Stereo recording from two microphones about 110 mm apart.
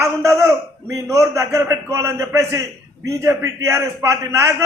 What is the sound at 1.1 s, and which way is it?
A man's voice, 30° right (ahead or behind).